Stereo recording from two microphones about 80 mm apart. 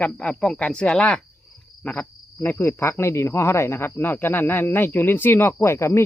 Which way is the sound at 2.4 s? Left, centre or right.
Left.